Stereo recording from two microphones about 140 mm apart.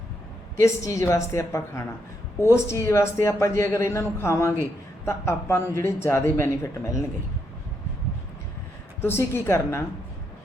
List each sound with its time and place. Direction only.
0.6 s a man's voice: 25° left (ahead or behind)
9.0 s a woman's voice: 15° left (ahead or behind)